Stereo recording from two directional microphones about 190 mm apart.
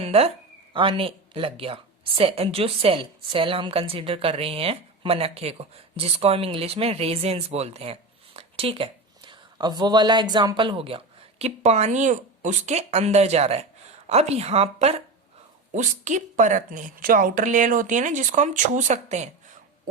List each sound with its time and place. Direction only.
0.0 s a woman's voice: 30° right (ahead or behind)